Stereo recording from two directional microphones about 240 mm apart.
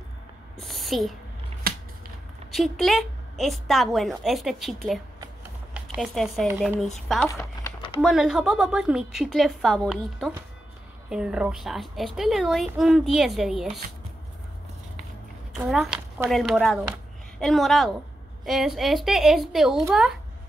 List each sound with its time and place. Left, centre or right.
0.6 s speech: centre
1.6 s a sound: right
2.5 s a woman's voice: centre
5.8 s speech: centre
7.2 s typing: centre
8.0 s a woman's voice: centre
15.5 s a woman's voice: centre